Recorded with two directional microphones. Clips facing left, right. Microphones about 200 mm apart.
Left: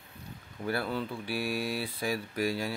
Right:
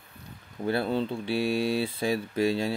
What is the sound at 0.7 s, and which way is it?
Speech, 25° right (ahead or behind).